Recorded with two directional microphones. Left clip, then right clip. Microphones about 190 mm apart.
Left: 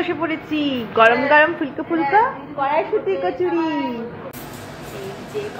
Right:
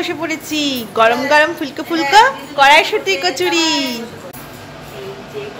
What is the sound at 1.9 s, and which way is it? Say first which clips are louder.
A woman's voice: right 7 dB; 25° right (ahead or behind).